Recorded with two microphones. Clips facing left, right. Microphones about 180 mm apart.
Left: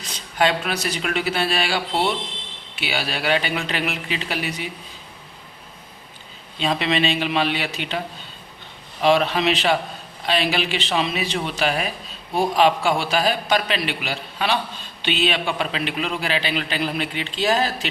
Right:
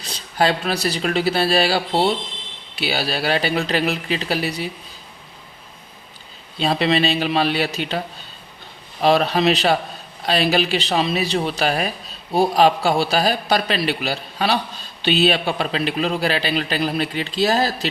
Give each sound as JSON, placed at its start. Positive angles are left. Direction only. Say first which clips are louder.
{"t": 0.0, "sound": "a man's voice", "louder": "right 1 dB", "side_deg": -35}
{"t": 6.6, "sound": "a man's voice", "louder": "right 3 dB", "side_deg": -35}